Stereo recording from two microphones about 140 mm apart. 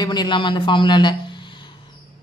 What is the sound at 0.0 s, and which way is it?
Speech, 30° left (ahead or behind).